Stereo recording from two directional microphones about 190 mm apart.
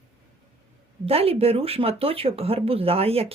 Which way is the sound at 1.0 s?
30° right (ahead or behind).